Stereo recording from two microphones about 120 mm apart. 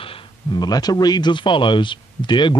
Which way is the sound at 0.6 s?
35° left (ahead or behind).